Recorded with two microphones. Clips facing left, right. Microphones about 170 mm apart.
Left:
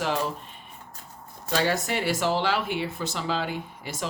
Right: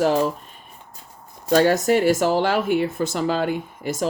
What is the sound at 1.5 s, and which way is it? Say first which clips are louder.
Speech: right 9 dB; 45° right (ahead or behind).